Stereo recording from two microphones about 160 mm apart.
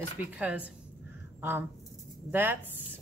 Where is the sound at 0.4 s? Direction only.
10° right (ahead or behind).